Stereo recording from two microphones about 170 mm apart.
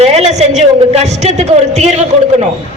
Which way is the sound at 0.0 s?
35° right (ahead or behind).